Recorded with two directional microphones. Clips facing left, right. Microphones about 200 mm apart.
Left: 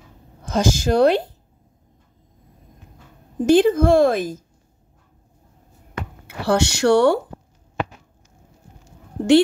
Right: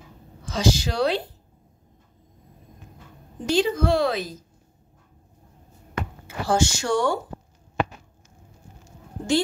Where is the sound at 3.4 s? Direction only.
55° left (ahead or behind).